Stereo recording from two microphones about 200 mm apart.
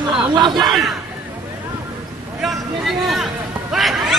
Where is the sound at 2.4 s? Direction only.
Centre (ahead or behind).